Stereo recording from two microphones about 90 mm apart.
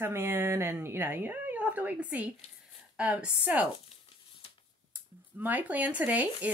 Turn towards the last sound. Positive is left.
turn(degrees=-15)  # may be behind; listen again after turning